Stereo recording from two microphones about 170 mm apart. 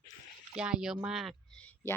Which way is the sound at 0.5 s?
5° right (ahead or behind).